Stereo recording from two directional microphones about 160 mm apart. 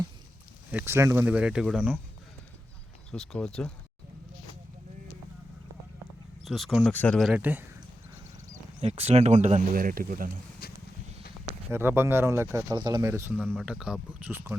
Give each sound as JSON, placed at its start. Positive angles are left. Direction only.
{"t": 0.7, "sound": "speech", "side_deg": -10}
{"t": 3.1, "sound": "speech", "side_deg": 5}
{"t": 6.4, "sound": "speech", "side_deg": 0}
{"t": 7.3, "sound": "speech", "side_deg": -10}
{"t": 8.8, "sound": "speech", "side_deg": -40}
{"t": 10.6, "sound": "a sound", "side_deg": 70}
{"t": 11.7, "sound": "speech", "side_deg": -15}
{"t": 13.5, "sound": "speech", "side_deg": 0}